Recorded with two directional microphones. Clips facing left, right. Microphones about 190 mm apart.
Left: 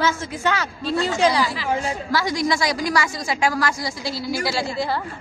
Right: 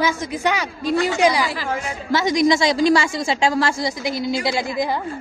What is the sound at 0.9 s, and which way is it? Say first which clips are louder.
Speech: right 3 dB; 75° right (ahead or behind).